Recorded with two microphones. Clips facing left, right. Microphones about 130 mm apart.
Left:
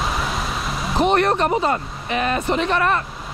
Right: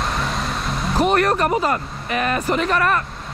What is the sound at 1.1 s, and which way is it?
Speech, 30° left (ahead or behind).